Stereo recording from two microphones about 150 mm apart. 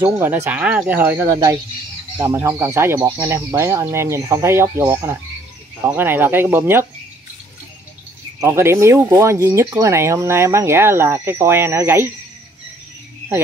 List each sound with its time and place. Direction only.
0.0 s speech: 15° right (ahead or behind)
8.4 s speech: 20° right (ahead or behind)